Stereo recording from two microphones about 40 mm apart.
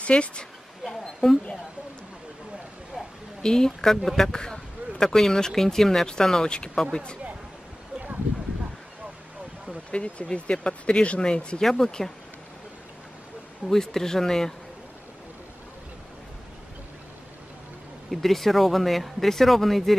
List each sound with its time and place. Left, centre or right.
0.0 s speech: left
0.8 s a sound: centre
3.4 s speech: centre
9.7 s speech: left
11.6 s speech: centre
13.7 s speech: centre
18.1 s speech: centre